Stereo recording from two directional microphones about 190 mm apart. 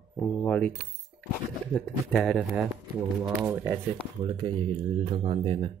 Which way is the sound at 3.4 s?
10° right (ahead or behind).